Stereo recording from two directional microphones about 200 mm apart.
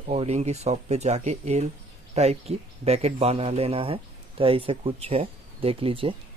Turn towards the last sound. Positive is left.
turn(degrees=-25)  # may be behind; listen again after turning